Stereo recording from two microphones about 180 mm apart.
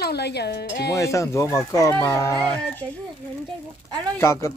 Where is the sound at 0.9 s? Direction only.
15° left (ahead or behind).